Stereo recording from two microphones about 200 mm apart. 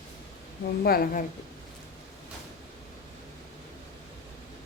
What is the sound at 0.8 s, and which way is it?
Speech, 50° left (ahead or behind).